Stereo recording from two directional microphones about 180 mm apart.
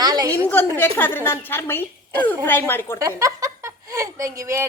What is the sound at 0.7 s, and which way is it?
A woman's voice, 10° left (ahead or behind).